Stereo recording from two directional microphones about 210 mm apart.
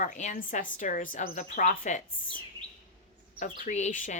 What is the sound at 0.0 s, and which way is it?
A woman's voice, 35° left (ahead or behind).